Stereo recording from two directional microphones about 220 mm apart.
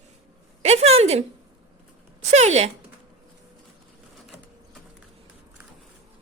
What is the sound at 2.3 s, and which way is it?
Speech, 30° right (ahead or behind).